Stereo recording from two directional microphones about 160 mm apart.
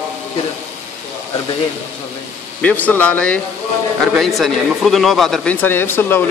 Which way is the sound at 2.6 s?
10° left (ahead or behind).